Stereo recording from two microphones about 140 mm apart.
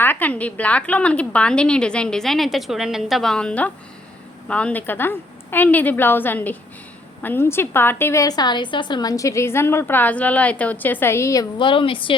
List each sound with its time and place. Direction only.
0.0 s a woman's voice: 15° left (ahead or behind)
11.5 s a woman's voice: 35° left (ahead or behind)